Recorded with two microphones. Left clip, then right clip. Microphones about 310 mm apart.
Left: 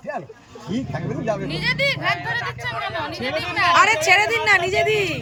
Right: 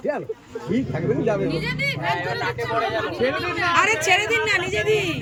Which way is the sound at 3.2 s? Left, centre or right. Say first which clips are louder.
Left 3 dB; centre.